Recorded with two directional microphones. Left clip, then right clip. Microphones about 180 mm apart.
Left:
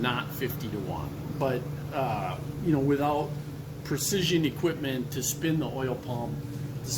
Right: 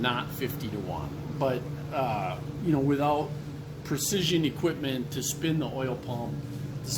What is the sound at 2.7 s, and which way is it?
Speech, 35° right (ahead or behind).